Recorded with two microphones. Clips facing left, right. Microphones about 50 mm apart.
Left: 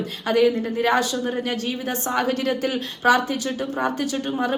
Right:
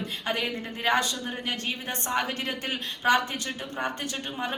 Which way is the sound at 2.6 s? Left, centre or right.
Right.